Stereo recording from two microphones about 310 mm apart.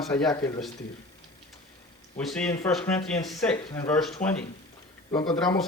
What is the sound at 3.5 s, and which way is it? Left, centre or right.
Speech, centre.